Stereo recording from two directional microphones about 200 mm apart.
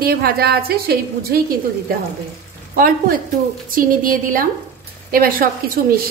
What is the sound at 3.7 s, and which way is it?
A woman's voice, 45° right (ahead or behind).